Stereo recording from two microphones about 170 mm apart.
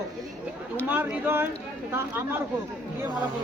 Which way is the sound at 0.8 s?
10° right (ahead or behind).